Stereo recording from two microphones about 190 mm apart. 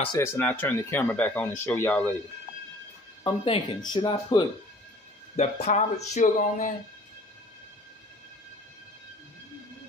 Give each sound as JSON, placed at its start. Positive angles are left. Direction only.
{"t": 0.2, "sound": "speech", "side_deg": 10}
{"t": 3.3, "sound": "speech", "side_deg": 25}
{"t": 5.3, "sound": "speech", "side_deg": 35}